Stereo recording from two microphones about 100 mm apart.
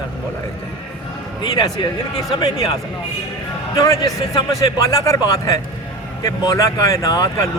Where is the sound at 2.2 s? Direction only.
40° left (ahead or behind).